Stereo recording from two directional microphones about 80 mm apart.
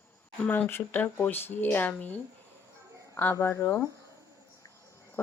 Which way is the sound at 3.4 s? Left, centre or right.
Left.